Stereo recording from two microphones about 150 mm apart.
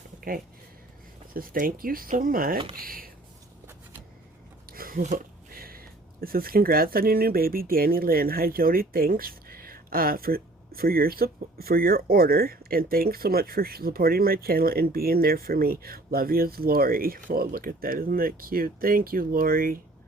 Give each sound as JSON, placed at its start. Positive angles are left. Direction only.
{"t": 0.2, "sound": "speech", "side_deg": -70}
{"t": 4.7, "sound": "speech", "side_deg": -75}